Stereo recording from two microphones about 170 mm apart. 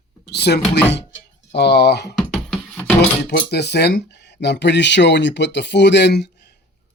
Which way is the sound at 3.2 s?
70° left (ahead or behind).